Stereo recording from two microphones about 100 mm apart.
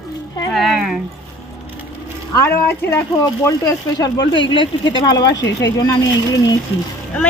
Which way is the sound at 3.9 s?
45° left (ahead or behind).